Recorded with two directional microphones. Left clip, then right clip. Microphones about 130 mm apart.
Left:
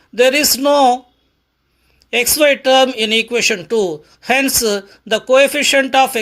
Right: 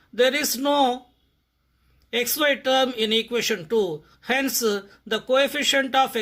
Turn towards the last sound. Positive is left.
turn(degrees=25)  # may be behind; listen again after turning